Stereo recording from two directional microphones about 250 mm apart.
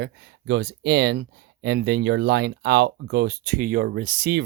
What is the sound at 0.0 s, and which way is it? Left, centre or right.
Speech, right.